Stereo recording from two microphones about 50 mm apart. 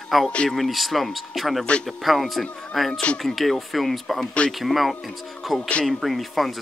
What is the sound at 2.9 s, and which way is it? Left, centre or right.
Speech, left.